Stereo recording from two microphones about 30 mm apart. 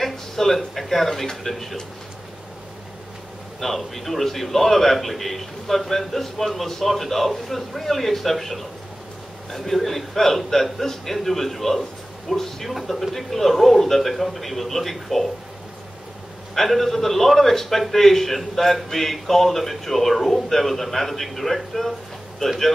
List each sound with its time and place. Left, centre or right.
0.0 s a man's voice: centre
3.6 s a man's voice: centre
16.5 s a man's voice: centre
22.4 s speech: centre